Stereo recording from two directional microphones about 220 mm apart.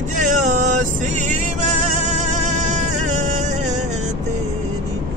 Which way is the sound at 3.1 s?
35° right (ahead or behind).